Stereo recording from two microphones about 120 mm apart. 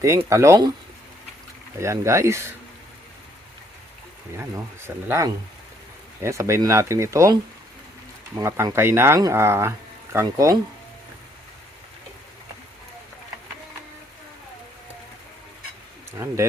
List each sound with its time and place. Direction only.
0.3 s speech: 25° right (ahead or behind)
1.8 s speech: 25° right (ahead or behind)
5.0 s speech: 25° right (ahead or behind)
8.4 s speech: 25° right (ahead or behind)
16.1 s speech: 25° right (ahead or behind)